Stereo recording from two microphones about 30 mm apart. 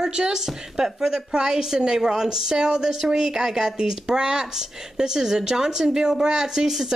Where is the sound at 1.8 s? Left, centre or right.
Right.